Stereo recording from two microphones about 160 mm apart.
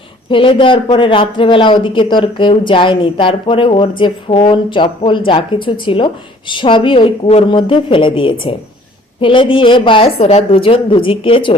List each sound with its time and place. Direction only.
0.3 s speech: 30° left (ahead or behind)